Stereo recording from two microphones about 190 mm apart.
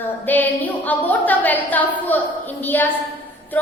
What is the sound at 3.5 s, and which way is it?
Music, 10° left (ahead or behind).